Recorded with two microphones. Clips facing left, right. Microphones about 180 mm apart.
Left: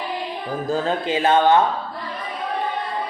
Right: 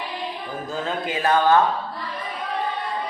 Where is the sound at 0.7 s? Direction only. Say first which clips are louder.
Left 5 dB; 30° left (ahead or behind).